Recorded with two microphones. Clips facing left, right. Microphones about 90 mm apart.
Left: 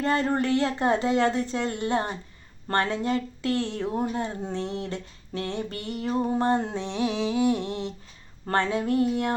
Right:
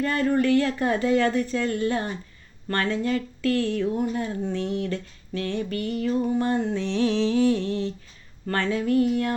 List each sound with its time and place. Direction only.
0.0 s speech: 30° left (ahead or behind)
6.7 s mantra: 15° left (ahead or behind)
8.5 s speech: 25° left (ahead or behind)